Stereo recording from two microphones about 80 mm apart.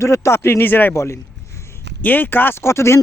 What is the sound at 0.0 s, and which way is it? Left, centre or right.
Speech, left.